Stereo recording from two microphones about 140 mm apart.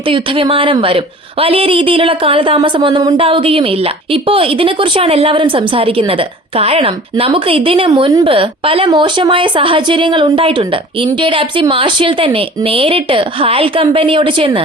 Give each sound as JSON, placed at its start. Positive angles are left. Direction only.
{"t": 0.1, "sound": "a woman's voice", "side_deg": -40}